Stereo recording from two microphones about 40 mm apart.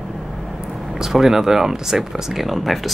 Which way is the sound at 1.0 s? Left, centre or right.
Centre.